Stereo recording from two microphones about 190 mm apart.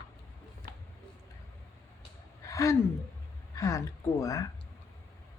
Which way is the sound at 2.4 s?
15° left (ahead or behind).